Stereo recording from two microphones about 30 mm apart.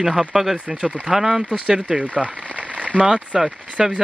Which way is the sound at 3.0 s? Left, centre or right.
Right.